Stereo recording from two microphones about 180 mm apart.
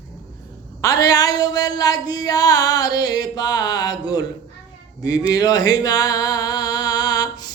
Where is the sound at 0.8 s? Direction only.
20° left (ahead or behind).